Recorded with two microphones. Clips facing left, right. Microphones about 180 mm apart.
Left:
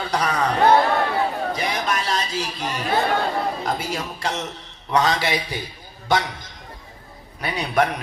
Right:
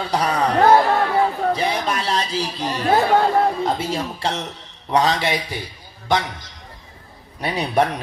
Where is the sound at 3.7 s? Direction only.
30° right (ahead or behind).